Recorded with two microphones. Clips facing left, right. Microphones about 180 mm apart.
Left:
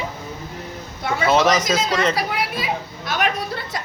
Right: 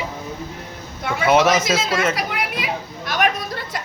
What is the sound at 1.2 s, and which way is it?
Speech, 10° right (ahead or behind).